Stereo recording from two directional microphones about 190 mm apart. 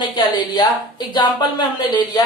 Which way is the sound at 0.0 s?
25° left (ahead or behind).